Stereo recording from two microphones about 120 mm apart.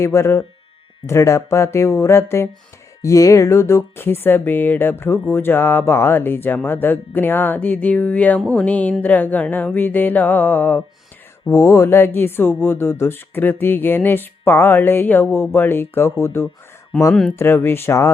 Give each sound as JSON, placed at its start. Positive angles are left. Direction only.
{"t": 0.0, "sound": "speech", "side_deg": 25}
{"t": 6.7, "sound": "music", "side_deg": 15}
{"t": 11.4, "sound": "speech", "side_deg": 25}